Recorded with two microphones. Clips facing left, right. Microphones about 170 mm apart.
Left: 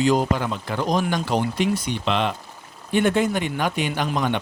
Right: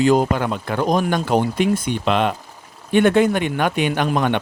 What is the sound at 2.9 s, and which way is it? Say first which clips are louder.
Speech: right 5 dB; 65° right (ahead or behind).